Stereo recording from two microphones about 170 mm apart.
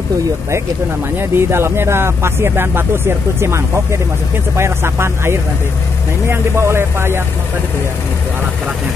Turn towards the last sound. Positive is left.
turn(degrees=-15)  # may be behind; listen again after turning